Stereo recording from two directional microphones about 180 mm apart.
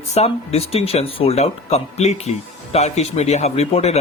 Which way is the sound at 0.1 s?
35° left (ahead or behind).